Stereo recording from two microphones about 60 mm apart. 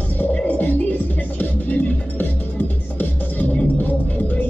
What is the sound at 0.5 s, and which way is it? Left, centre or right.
Music, left.